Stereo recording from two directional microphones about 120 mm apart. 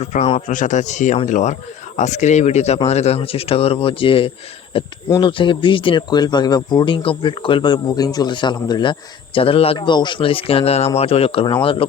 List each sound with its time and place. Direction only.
0.0 s speech: 75° left (ahead or behind)
0.4 s a man's voice: 90° left; by 11.9 s 50° left (ahead or behind)